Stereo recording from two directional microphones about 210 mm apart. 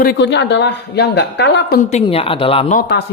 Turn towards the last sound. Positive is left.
turn(degrees=50)  # may be behind; listen again after turning